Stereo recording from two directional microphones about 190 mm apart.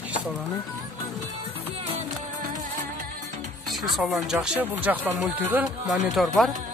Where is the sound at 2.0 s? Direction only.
40° right (ahead or behind).